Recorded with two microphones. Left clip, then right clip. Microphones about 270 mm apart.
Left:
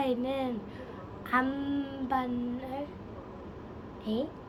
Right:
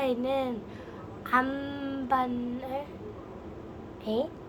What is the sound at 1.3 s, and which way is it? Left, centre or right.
Child singing, centre.